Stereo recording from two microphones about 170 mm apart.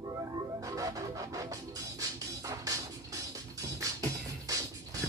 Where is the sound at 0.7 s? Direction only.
20° right (ahead or behind).